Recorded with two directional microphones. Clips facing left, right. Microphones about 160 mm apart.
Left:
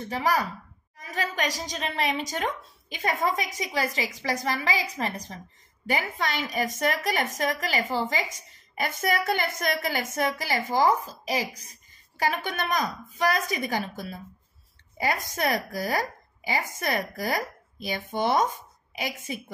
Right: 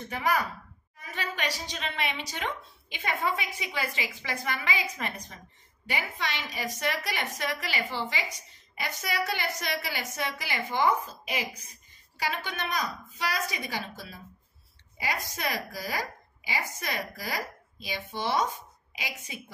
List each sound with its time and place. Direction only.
0.1 s a woman's voice: 35° left (ahead or behind)
5.9 s a woman's voice: 45° left (ahead or behind)
12.2 s a woman's voice: 50° left (ahead or behind)